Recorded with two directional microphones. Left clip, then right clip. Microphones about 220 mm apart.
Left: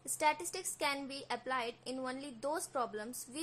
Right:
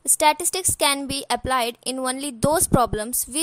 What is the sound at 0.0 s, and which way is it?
A woman's voice, 45° right (ahead or behind).